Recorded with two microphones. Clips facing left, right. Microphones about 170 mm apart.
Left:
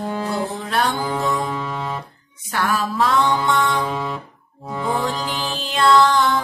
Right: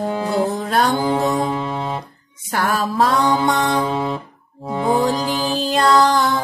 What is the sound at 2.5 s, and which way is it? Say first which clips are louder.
Music: right 2 dB; 40° right (ahead or behind).